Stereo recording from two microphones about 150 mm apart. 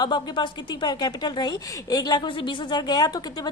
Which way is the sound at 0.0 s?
30° left (ahead or behind).